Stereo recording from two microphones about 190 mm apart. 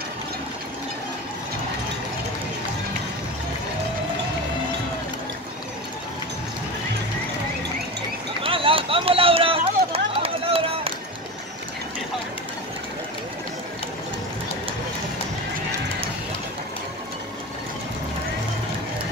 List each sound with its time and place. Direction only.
8.4 s run: 30° right (ahead or behind)